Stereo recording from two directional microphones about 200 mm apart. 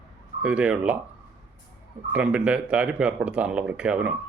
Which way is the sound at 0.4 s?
5° right (ahead or behind).